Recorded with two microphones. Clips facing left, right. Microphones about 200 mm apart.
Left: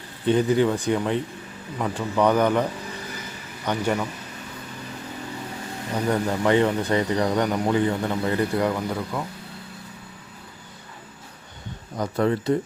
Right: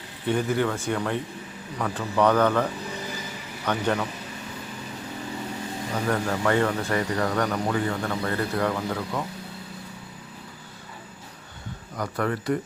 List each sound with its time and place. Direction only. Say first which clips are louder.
0.3 s speech: left 5 dB; 20° left (ahead or behind)
3.7 s speech: left 1 dB; 10° left (ahead or behind)
5.9 s speech: left 3 dB; 15° left (ahead or behind)
11.9 s speech: left 5 dB; 25° left (ahead or behind)